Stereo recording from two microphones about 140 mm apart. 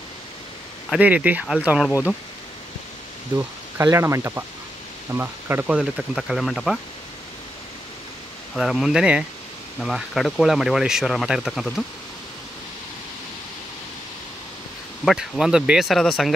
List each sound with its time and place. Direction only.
0.8 s speech: 10° right (ahead or behind)
1.9 s speech: 20° left (ahead or behind)
3.7 s speech: 20° right (ahead or behind)
5.9 s speech: centre (ahead or behind)
8.5 s speech: centre (ahead or behind)
15.0 s speech: centre (ahead or behind)